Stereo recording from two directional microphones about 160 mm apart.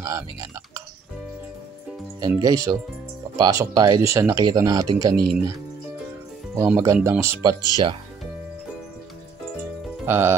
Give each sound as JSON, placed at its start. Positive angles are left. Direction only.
{"t": 0.0, "sound": "speech", "side_deg": -20}
{"t": 2.1, "sound": "speech", "side_deg": -25}
{"t": 5.1, "sound": "speech", "side_deg": -70}
{"t": 6.5, "sound": "speech", "side_deg": -15}
{"t": 10.0, "sound": "music", "side_deg": -15}